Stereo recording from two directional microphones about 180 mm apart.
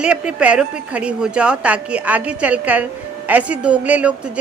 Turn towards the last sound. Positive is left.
turn(degrees=-5)  # may be behind; listen again after turning